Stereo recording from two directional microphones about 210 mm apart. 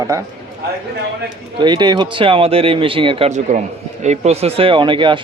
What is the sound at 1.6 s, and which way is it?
Speech, 20° right (ahead or behind).